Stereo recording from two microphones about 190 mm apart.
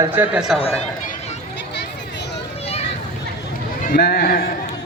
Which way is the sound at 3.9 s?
55° left (ahead or behind).